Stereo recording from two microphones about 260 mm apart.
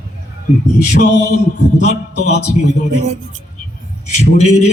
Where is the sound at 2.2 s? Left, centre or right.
Left.